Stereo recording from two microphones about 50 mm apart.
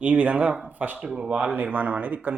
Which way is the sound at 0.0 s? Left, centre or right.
Right.